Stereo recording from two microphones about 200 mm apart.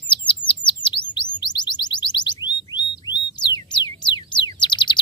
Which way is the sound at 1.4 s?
20° left (ahead or behind).